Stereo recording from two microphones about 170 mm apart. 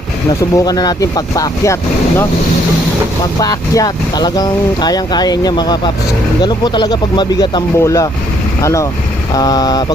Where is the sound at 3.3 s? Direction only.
20° left (ahead or behind).